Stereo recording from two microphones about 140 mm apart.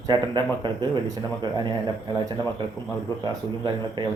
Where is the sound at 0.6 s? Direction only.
30° right (ahead or behind).